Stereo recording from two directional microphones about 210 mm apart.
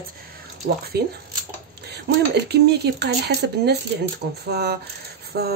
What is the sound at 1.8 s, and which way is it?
Speech, 50° right (ahead or behind).